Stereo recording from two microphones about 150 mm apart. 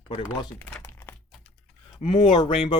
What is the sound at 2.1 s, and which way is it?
Speech, 35° left (ahead or behind).